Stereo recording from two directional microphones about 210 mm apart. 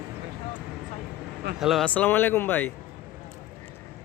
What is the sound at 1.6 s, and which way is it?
Speech, centre (ahead or behind).